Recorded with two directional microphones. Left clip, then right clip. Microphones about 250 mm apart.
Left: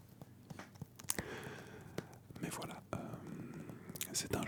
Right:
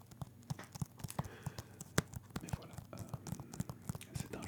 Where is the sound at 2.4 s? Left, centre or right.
Left.